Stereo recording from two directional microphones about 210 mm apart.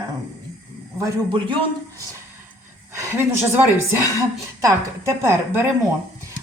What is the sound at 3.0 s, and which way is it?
A woman's voice, 10° right (ahead or behind).